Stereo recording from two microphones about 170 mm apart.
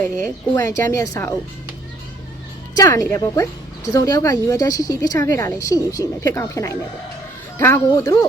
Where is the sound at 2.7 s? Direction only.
20° left (ahead or behind).